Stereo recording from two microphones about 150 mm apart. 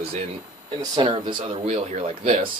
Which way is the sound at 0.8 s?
30° right (ahead or behind).